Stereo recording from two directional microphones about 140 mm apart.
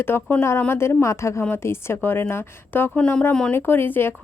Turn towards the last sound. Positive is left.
turn(degrees=15)  # may be behind; listen again after turning